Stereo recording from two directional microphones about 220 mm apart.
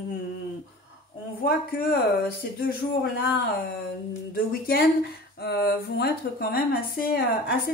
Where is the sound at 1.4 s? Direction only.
45° left (ahead or behind).